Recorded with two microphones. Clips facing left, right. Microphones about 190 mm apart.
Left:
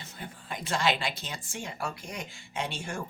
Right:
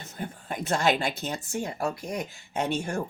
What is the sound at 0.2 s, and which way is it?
Speech, 45° right (ahead or behind).